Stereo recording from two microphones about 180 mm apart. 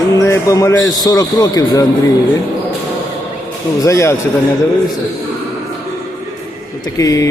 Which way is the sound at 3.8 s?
15° left (ahead or behind).